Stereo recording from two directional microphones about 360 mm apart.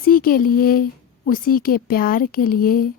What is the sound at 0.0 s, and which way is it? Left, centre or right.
A woman's voice, left.